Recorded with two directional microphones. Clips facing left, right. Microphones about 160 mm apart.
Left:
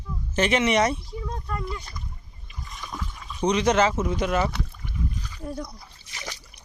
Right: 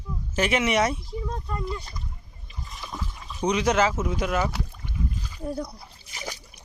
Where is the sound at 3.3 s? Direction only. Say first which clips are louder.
Left 2 dB; 5° right (ahead or behind).